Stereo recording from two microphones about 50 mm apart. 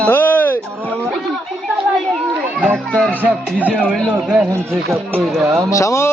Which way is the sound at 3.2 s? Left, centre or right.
Right.